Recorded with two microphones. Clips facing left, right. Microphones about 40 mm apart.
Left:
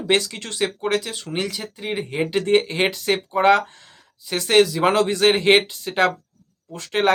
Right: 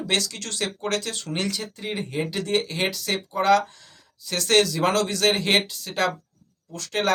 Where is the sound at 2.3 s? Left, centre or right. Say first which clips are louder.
Left 9 dB; left.